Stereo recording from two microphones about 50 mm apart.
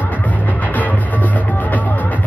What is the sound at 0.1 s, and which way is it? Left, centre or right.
Music, left.